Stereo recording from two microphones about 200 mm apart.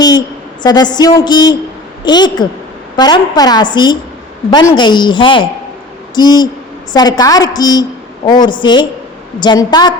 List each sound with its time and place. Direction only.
0.6 s a woman's voice: 20° left (ahead or behind)